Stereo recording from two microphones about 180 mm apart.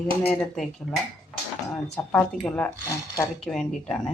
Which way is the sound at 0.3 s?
5° left (ahead or behind).